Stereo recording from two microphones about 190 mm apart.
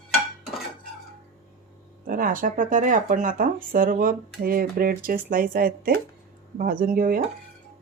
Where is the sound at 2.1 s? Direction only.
45° right (ahead or behind).